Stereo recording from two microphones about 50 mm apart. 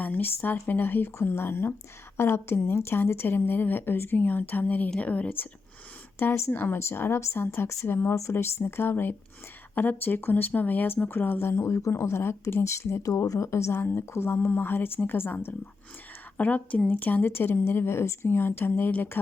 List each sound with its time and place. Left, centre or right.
0.0 s speech: left
6.5 s speech: left
6.7 s speech: left
11.1 s speech: left
11.5 s speech: left
12.6 s speech: left
13.7 s speech: left
14.1 s speech: left
16.4 s a woman's voice: left